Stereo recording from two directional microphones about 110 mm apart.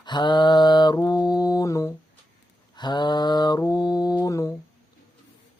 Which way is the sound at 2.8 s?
40° left (ahead or behind).